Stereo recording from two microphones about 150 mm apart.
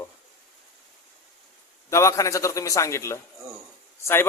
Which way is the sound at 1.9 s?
20° left (ahead or behind).